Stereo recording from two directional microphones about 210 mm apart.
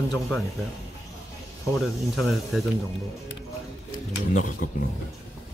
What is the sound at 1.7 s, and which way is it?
Speech, centre (ahead or behind).